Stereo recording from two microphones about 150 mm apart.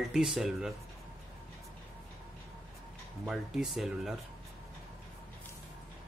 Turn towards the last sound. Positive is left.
turn(degrees=0)  # may be behind; listen again after turning